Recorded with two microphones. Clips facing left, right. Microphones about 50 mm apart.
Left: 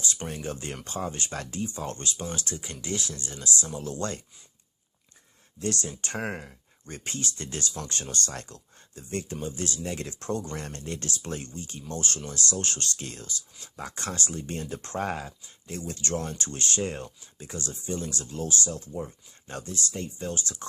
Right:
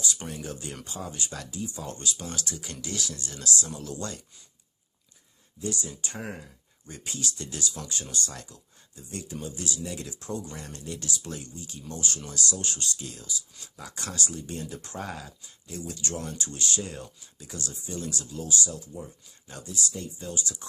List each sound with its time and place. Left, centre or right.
0.0 s speech: left
2.1 s speech: left
5.5 s speech: left
13.6 s speech: left